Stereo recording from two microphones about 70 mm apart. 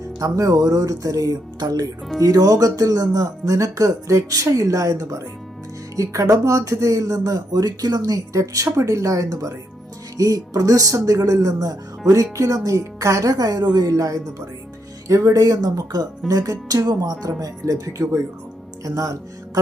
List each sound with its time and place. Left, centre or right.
0.2 s speech: right
13.9 s speech: right